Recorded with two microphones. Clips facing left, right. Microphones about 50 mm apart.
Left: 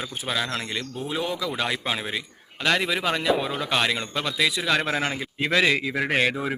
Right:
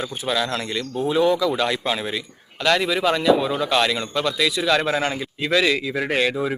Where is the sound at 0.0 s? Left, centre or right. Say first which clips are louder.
Right 4 dB; centre.